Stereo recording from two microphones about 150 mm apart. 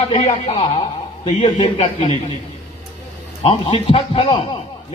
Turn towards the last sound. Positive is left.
turn(degrees=40)  # may be behind; listen again after turning